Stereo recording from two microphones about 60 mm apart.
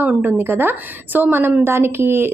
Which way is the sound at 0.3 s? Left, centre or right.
Right.